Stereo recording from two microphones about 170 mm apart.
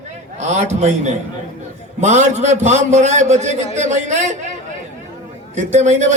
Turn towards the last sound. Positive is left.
turn(degrees=-45)  # may be behind; listen again after turning